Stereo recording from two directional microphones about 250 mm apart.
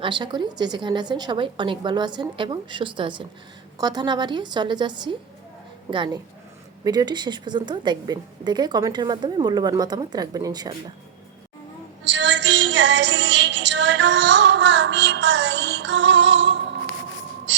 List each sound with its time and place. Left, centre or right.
0.0 s a woman's voice: centre
12.0 s music: right